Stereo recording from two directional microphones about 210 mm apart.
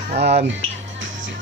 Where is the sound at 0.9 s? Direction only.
60° right (ahead or behind).